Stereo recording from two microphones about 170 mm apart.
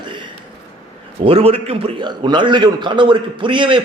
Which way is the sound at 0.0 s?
25° right (ahead or behind).